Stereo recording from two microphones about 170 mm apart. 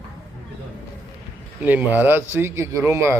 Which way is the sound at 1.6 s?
10° right (ahead or behind).